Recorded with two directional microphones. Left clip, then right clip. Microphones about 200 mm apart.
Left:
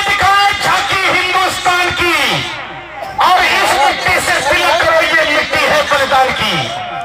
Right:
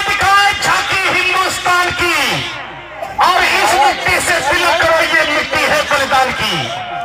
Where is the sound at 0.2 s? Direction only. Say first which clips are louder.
Right 1 dB; 30° left (ahead or behind).